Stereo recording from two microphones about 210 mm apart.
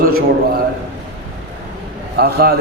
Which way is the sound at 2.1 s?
50° right (ahead or behind).